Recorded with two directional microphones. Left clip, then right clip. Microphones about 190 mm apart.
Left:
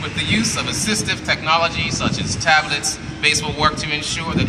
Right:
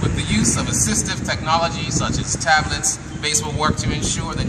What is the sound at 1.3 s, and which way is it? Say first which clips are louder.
Speech: left 2 dB; 15° left (ahead or behind).